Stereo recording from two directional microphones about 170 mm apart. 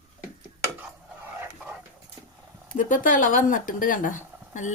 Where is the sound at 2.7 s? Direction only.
50° left (ahead or behind).